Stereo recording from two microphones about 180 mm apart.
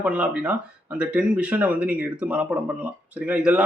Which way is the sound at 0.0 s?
10° right (ahead or behind).